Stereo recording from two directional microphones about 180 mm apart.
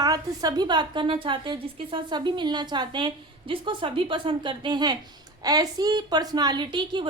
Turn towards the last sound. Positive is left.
turn(degrees=-25)  # may be behind; listen again after turning